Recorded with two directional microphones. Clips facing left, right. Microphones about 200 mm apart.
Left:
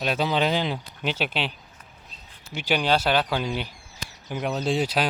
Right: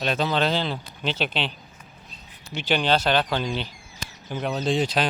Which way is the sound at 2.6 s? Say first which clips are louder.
Right 1 dB; 10° left (ahead or behind).